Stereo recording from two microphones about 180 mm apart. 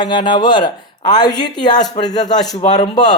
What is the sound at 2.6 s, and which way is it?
Speech, 35° left (ahead or behind).